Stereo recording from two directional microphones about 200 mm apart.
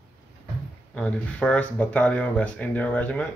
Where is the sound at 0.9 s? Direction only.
5° left (ahead or behind).